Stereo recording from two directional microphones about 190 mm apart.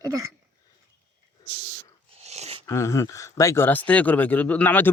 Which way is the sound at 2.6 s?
15° left (ahead or behind).